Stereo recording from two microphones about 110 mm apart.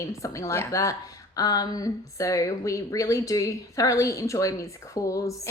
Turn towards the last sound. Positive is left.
turn(degrees=30)  # may be behind; listen again after turning